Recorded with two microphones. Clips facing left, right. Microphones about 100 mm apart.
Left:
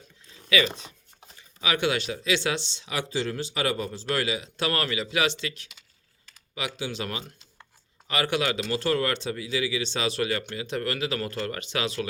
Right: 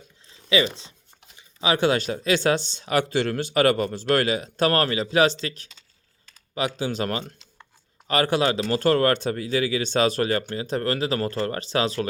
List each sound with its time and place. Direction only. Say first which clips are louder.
0.5 s speech: right 3 dB; 25° right (ahead or behind)